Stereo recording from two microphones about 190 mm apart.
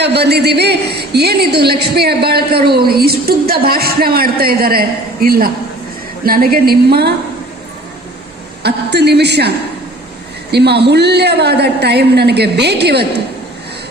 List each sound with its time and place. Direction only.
0.0 s a woman's voice: 60° right (ahead or behind)
8.6 s a woman's voice: 60° right (ahead or behind)
10.5 s a woman's voice: 60° right (ahead or behind)